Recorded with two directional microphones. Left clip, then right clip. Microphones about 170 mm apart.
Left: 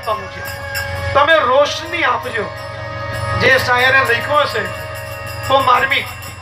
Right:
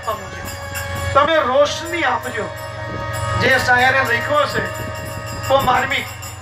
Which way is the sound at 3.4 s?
15° left (ahead or behind).